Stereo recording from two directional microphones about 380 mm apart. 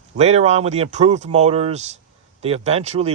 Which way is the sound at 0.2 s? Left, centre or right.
Centre.